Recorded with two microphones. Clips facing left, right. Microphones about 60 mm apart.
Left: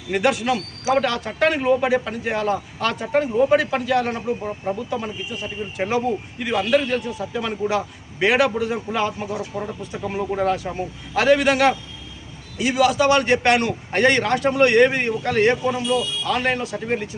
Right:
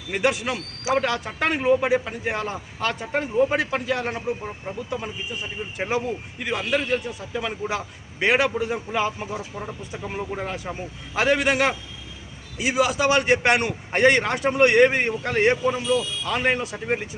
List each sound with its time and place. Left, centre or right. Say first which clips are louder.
0.1 s a man's voice: left 4 dB; centre
9.9 s a man's voice: left 5 dB; centre